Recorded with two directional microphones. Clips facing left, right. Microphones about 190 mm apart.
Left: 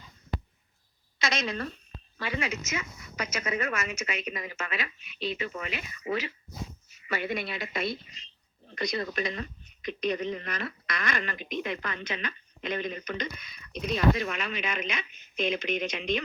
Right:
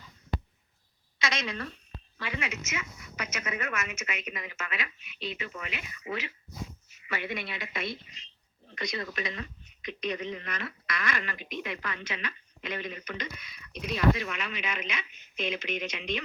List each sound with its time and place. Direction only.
1.2 s a woman's voice: 35° left (ahead or behind)